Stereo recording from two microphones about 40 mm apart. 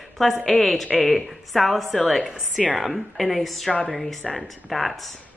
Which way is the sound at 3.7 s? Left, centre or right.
Centre.